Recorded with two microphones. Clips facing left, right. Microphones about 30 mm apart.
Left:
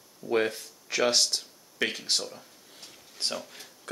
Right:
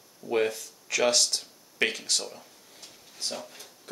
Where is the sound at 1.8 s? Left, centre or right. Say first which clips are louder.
Right 2 dB; centre.